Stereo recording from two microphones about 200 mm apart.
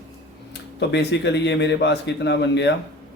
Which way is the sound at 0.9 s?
60° left (ahead or behind).